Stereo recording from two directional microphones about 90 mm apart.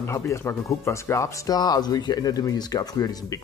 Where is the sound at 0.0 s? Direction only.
30° left (ahead or behind).